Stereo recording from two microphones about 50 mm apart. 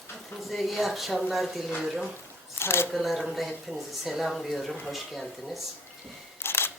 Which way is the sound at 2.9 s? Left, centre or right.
Centre.